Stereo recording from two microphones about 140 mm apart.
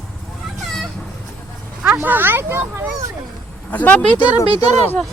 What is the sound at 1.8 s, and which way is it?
Speech, 15° right (ahead or behind).